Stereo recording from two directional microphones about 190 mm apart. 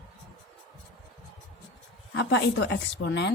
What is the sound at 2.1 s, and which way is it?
A woman's voice, 65° left (ahead or behind).